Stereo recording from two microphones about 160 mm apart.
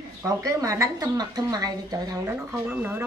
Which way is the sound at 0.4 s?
20° right (ahead or behind).